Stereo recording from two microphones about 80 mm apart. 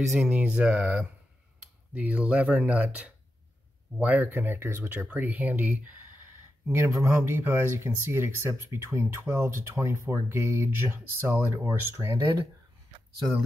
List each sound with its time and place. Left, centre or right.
0.2 s speech: centre
6.7 s speech: right